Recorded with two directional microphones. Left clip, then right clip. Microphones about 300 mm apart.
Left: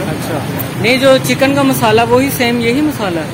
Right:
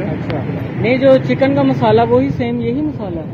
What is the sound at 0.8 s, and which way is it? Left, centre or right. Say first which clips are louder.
Speech: left 2 dB; centre.